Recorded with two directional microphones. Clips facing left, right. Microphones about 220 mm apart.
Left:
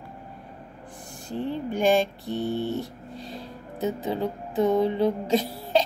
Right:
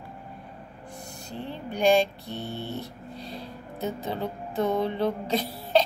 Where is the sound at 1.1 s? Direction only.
50° left (ahead or behind).